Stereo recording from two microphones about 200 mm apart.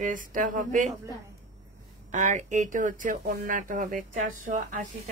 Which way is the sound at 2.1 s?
40° right (ahead or behind).